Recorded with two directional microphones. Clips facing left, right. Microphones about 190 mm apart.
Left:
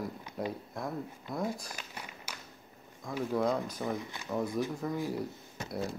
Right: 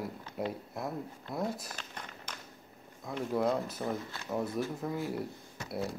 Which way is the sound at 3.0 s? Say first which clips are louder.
Left 1 dB; centre (ahead or behind).